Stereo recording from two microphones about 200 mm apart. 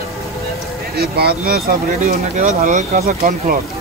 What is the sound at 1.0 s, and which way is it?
Speech, 50° right (ahead or behind).